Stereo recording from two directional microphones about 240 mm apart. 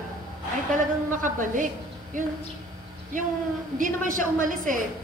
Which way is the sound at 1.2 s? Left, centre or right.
Right.